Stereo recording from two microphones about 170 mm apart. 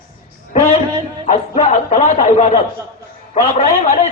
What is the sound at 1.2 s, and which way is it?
A man's voice, 40° left (ahead or behind).